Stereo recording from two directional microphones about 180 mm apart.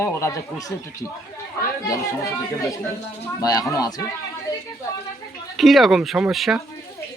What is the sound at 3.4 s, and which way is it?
Speech, 20° left (ahead or behind).